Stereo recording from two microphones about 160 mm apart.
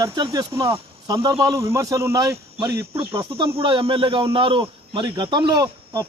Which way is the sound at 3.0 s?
30° right (ahead or behind).